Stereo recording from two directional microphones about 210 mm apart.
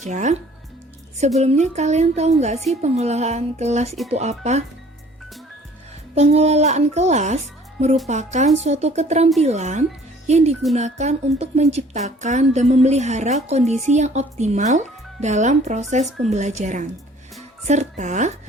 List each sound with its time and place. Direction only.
0.1 s a woman's voice: 35° right (ahead or behind)
1.4 s a woman's voice: 30° right (ahead or behind)
6.1 s a woman's voice: 30° right (ahead or behind)